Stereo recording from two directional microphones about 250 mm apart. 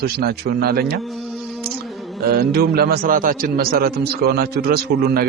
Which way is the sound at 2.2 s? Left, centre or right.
Right.